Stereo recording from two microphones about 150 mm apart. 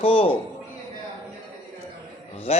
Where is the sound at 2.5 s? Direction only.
40° left (ahead or behind).